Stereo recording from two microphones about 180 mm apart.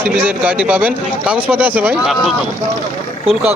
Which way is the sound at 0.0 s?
10° right (ahead or behind).